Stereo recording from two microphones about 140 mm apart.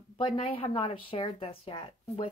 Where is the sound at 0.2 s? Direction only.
40° left (ahead or behind).